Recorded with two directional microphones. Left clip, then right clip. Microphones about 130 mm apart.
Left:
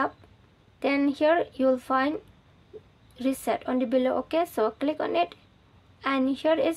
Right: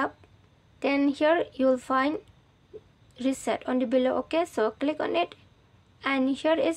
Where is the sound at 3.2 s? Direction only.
25° right (ahead or behind).